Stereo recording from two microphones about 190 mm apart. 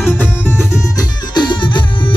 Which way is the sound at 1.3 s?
25° left (ahead or behind).